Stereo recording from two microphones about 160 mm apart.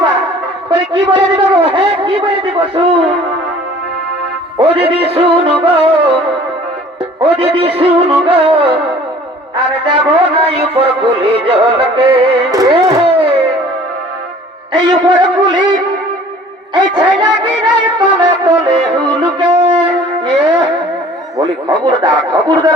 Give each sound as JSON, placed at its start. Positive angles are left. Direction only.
{"t": 0.7, "sound": "music", "side_deg": -30}
{"t": 4.5, "sound": "music", "side_deg": -35}
{"t": 7.2, "sound": "music", "side_deg": -35}
{"t": 9.8, "sound": "music", "side_deg": -30}
{"t": 12.5, "sound": "music", "side_deg": -25}
{"t": 13.1, "sound": "a sound", "side_deg": -35}
{"t": 14.7, "sound": "a man's voice", "side_deg": -30}
{"t": 16.7, "sound": "a man's voice", "side_deg": -30}
{"t": 18.0, "sound": "music", "side_deg": -30}
{"t": 21.3, "sound": "a man's voice", "side_deg": -30}